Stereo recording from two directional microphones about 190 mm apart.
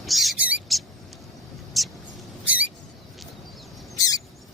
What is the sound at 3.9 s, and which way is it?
Bird, 20° left (ahead or behind).